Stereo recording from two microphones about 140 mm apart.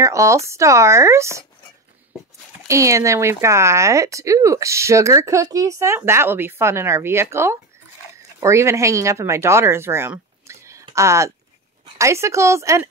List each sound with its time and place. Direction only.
0.0 s speech: 20° right (ahead or behind)
2.7 s speech: 20° right (ahead or behind)